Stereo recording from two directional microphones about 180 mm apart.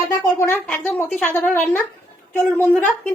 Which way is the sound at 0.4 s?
10° left (ahead or behind).